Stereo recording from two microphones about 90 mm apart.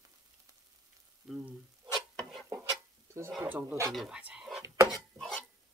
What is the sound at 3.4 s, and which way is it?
Speech, 20° right (ahead or behind).